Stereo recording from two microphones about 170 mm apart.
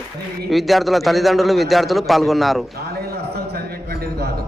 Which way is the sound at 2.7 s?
65° right (ahead or behind).